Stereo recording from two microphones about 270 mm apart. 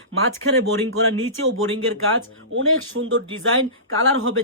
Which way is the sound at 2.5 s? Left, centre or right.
Right.